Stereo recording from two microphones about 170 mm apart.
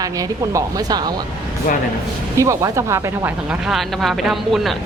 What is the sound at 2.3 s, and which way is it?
Speech, 15° right (ahead or behind).